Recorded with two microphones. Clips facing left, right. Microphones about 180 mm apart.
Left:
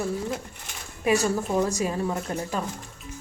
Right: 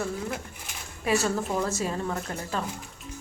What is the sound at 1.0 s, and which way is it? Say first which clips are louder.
A woman's voice: left 3 dB; 15° left (ahead or behind).